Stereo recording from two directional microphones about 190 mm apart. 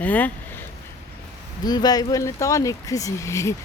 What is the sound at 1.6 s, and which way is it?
Speech, 20° left (ahead or behind).